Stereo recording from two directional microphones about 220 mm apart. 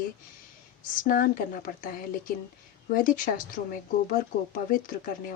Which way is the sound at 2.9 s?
40° left (ahead or behind).